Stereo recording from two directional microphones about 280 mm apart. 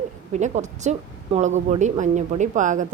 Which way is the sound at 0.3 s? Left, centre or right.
Right.